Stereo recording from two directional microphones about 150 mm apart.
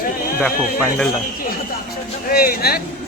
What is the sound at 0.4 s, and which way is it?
Speech, 5° left (ahead or behind).